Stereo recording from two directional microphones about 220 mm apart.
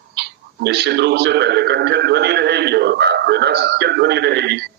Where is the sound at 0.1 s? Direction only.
50° right (ahead or behind).